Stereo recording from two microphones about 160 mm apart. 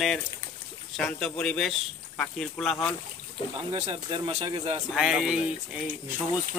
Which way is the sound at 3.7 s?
35° right (ahead or behind).